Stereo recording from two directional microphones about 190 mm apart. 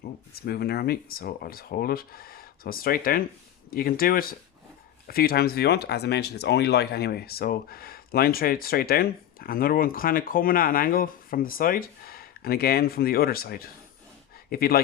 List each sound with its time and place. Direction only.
0.3 s speech: 55° left (ahead or behind)